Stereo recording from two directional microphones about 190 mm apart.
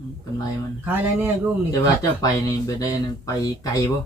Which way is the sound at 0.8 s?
10° right (ahead or behind).